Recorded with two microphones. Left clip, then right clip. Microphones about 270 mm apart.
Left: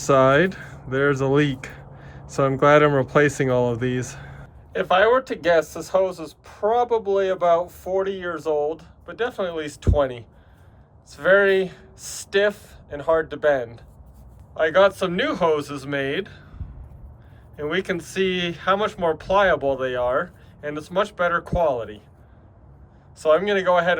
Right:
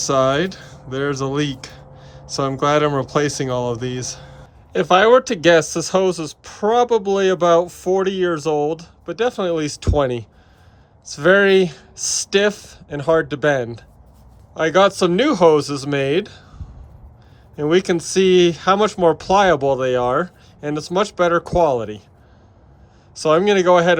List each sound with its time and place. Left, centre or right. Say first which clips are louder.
0.0 s speech: left 1 dB; centre
4.7 s speech: right 5 dB; right
17.6 s speech: right 8 dB; centre
23.1 s speech: right 4 dB; right